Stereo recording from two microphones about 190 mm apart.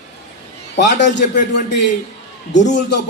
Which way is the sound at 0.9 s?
65° left (ahead or behind).